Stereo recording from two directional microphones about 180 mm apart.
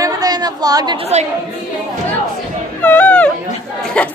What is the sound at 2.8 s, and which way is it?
Speech, 10° left (ahead or behind).